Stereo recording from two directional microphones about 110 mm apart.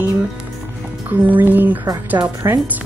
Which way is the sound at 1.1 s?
15° right (ahead or behind).